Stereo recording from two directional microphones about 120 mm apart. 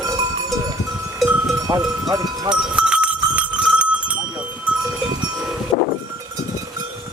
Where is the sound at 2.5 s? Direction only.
5° right (ahead or behind).